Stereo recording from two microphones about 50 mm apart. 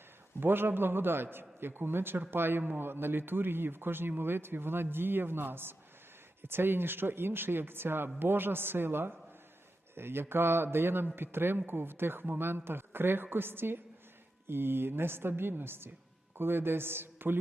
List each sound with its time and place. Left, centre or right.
0.3 s a man's voice: right